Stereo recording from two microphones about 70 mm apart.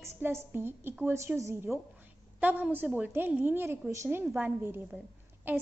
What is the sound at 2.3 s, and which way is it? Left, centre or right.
A woman's voice, right.